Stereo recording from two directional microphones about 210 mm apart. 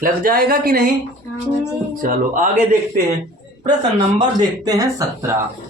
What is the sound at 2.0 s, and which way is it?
Speech, 40° right (ahead or behind).